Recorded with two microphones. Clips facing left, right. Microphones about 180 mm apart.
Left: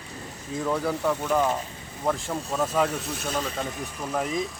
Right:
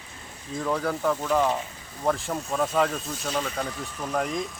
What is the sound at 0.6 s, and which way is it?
Speech, 5° left (ahead or behind).